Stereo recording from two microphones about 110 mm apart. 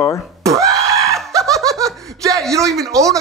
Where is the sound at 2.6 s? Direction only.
5° left (ahead or behind).